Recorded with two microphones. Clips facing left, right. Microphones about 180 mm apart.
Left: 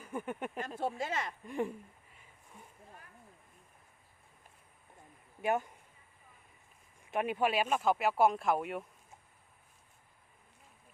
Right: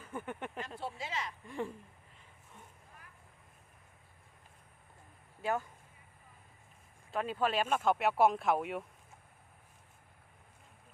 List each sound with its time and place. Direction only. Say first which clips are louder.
0.0 s speech: left 3 dB; 15° left (ahead or behind)
0.8 s speech: left 6 dB; 50° left (ahead or behind)
1.5 s speech: left 5 dB; 15° left (ahead or behind)
5.4 s speech: left 3 dB; 20° left (ahead or behind)
7.1 s speech: left 2 dB; 15° left (ahead or behind); by 8.8 s centre (ahead or behind)